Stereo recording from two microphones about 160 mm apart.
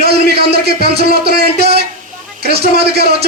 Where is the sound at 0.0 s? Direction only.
90° right.